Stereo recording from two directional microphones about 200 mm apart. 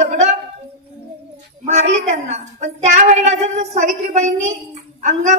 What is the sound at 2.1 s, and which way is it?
A woman's voice, 35° right (ahead or behind).